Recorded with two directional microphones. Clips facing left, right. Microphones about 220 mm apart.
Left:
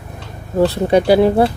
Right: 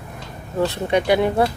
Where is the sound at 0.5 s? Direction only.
35° left (ahead or behind).